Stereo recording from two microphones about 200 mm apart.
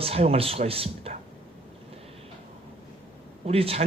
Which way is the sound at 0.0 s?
30° right (ahead or behind).